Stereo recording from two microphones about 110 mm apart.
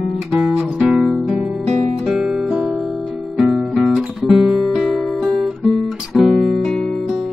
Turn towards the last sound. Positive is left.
turn(degrees=0)  # may be behind; listen again after turning